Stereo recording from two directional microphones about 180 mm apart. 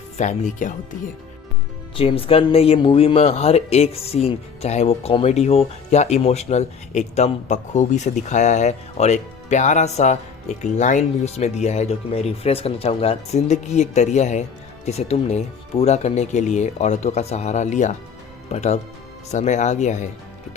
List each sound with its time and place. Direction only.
0.2 s speech: 40° left (ahead or behind)
2.0 s speech: 30° left (ahead or behind)